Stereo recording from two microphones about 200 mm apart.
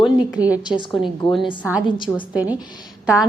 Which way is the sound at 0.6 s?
20° left (ahead or behind).